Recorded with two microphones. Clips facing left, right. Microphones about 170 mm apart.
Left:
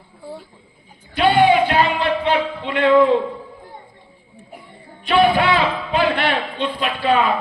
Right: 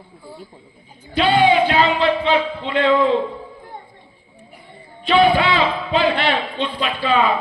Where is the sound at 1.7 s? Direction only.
55° left (ahead or behind).